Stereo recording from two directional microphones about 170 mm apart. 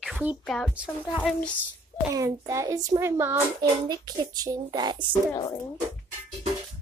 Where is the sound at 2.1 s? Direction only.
20° right (ahead or behind).